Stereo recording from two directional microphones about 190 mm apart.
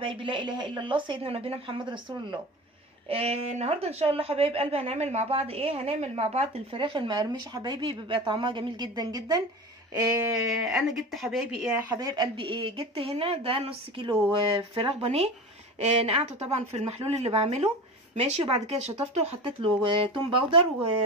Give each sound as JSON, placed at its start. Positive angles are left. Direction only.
{"t": 0.0, "sound": "speech", "side_deg": -25}
{"t": 10.6, "sound": "speech", "side_deg": 0}
{"t": 11.9, "sound": "speech", "side_deg": -20}
{"t": 14.0, "sound": "speech", "side_deg": -10}
{"t": 14.3, "sound": "speech", "side_deg": -25}